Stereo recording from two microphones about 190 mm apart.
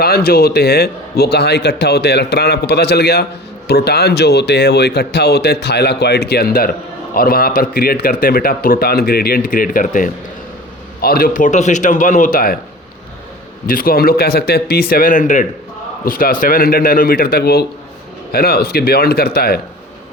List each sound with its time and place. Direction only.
0.0 s a man's voice: 55° left (ahead or behind)
13.7 s speech: 50° left (ahead or behind)